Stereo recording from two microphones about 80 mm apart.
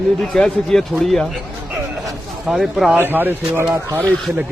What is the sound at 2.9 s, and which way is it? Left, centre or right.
Speech, right.